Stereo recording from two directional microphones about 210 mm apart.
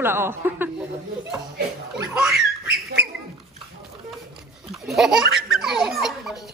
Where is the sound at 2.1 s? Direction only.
5° right (ahead or behind).